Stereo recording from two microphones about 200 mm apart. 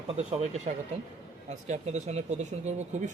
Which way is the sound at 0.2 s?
35° right (ahead or behind).